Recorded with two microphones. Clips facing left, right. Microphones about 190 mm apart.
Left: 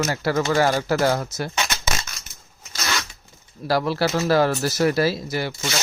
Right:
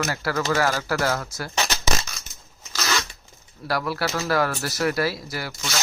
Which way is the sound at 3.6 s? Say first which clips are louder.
Left 5 dB; 25° left (ahead or behind).